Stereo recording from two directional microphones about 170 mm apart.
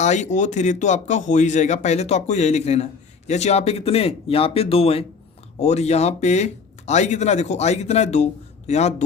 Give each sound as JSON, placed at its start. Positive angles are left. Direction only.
{"t": 0.0, "sound": "speech", "side_deg": 45}